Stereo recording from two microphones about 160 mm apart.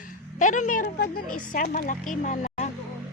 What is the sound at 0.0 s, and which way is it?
A woman's voice, 55° left (ahead or behind).